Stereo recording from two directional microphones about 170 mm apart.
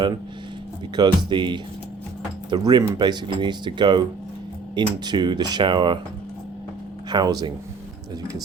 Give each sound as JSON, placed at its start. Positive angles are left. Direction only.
{"t": 0.9, "sound": "speech", "side_deg": -25}
{"t": 7.1, "sound": "speech", "side_deg": -25}